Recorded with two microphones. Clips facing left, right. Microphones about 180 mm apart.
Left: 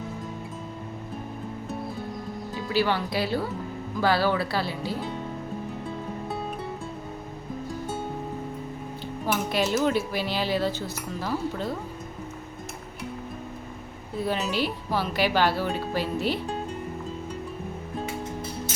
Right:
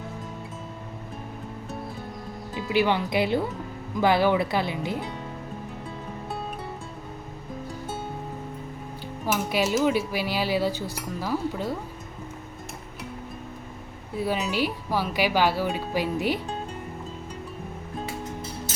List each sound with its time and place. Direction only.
2.6 s speech: 15° right (ahead or behind)
9.2 s speech: 10° right (ahead or behind)
14.2 s speech: 10° right (ahead or behind)